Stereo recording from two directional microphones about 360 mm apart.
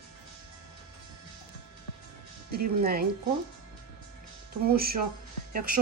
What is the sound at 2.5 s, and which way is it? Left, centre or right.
Speech, right.